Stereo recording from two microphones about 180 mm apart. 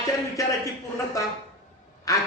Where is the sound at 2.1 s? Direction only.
20° left (ahead or behind).